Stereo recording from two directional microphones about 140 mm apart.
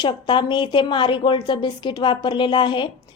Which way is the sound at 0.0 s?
35° left (ahead or behind).